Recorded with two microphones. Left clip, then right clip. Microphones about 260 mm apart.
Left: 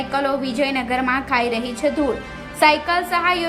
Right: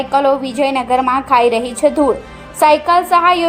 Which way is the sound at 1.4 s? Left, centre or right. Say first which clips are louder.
Right 9 dB; centre.